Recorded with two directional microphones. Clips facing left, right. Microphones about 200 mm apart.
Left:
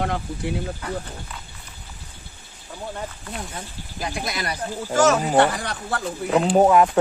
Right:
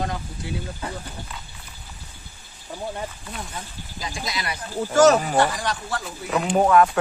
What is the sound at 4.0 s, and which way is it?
Speech, 60° left (ahead or behind).